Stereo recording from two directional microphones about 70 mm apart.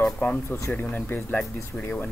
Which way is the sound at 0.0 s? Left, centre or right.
Centre.